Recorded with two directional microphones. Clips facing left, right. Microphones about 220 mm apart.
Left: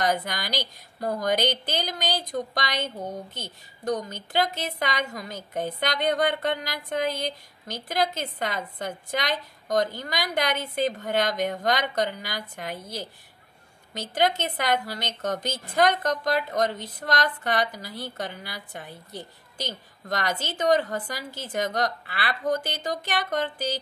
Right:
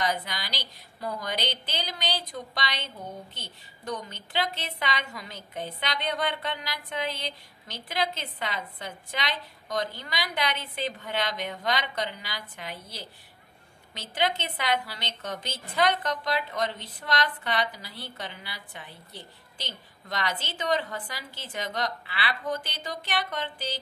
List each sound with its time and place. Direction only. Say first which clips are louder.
0.0 s a woman's voice: left 4 dB; 45° left (ahead or behind)
14.1 s a woman's voice: left 4 dB; 45° left (ahead or behind)